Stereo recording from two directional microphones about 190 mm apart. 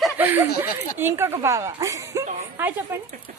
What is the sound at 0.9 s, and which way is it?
A woman's voice, 10° right (ahead or behind).